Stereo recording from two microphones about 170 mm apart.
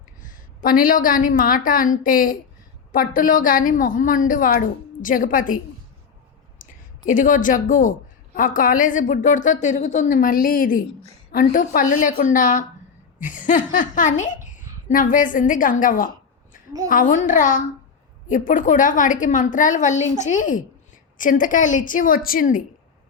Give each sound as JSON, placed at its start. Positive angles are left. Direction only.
{"t": 0.2, "sound": "a woman's voice", "side_deg": 55}
{"t": 6.6, "sound": "a woman's voice", "side_deg": 50}